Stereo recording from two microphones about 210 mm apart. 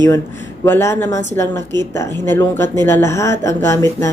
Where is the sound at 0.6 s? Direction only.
10° left (ahead or behind).